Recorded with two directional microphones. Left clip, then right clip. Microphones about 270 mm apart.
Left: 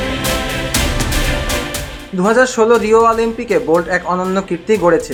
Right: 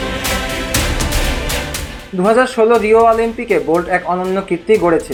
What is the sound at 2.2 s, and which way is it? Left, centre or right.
Speech, centre.